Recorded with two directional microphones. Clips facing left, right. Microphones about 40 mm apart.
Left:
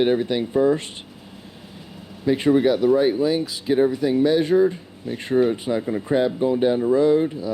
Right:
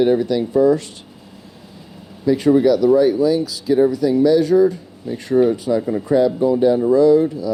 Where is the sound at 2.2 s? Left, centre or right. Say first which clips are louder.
Right 4 dB; left.